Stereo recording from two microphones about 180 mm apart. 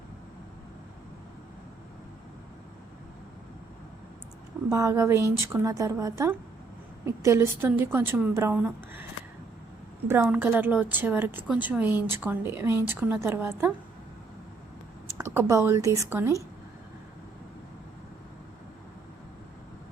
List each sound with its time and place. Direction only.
4.7 s a woman's voice: 15° right (ahead or behind)
10.1 s a woman's voice: 10° right (ahead or behind)
15.2 s a woman's voice: 15° right (ahead or behind)